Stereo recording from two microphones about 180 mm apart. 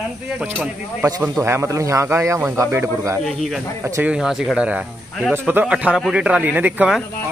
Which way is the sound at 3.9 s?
15° right (ahead or behind).